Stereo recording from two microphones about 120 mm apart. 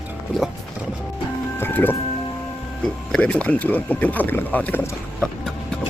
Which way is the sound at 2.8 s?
5° left (ahead or behind).